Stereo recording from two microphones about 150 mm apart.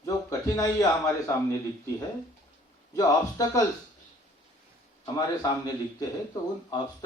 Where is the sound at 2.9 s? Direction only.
25° left (ahead or behind).